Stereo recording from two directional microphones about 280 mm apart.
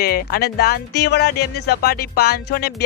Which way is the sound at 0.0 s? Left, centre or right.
Left.